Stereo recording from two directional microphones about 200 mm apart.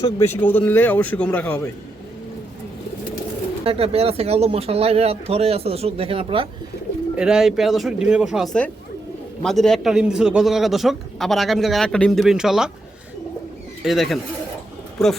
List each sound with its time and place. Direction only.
0.0 s speech: 10° left (ahead or behind)
3.6 s speech: 30° right (ahead or behind)
7.2 s a man's voice: 5° right (ahead or behind)
13.8 s a man's voice: centre (ahead or behind)